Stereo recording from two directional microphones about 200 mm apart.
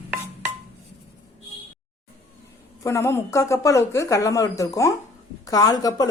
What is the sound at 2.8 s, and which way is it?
A woman's voice, 15° left (ahead or behind).